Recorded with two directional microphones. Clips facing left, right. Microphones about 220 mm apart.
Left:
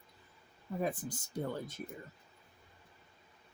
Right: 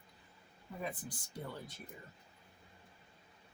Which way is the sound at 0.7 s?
45° left (ahead or behind).